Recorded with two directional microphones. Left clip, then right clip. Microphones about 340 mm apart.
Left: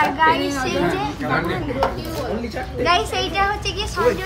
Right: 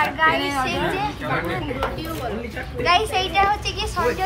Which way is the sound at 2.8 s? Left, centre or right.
Centre.